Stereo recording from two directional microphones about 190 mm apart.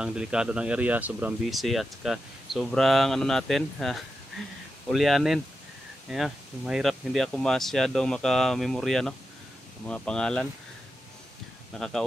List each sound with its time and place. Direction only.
0.0 s speech: 5° right (ahead or behind)
11.7 s speech: centre (ahead or behind)